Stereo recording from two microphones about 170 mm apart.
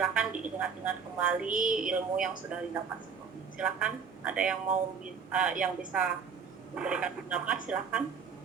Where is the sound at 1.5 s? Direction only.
55° right (ahead or behind).